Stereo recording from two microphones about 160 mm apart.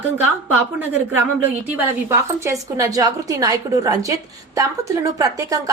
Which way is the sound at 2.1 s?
20° right (ahead or behind).